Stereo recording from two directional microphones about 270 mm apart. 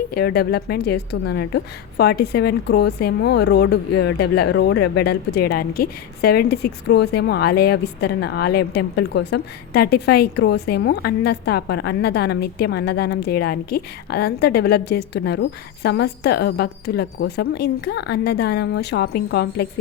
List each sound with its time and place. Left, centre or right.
0.1 s a woman's voice: left